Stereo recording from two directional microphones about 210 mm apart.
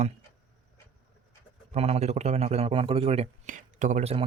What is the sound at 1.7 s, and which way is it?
A man's voice, 30° right (ahead or behind).